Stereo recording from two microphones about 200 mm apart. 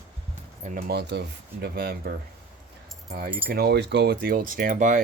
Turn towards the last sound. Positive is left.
turn(degrees=-40)  # may be behind; listen again after turning